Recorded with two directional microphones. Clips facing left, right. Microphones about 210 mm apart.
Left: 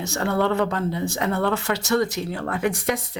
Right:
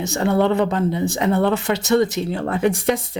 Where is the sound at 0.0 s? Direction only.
20° right (ahead or behind).